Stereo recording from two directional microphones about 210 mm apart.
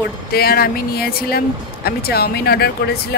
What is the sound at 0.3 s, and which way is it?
Speech, 45° left (ahead or behind).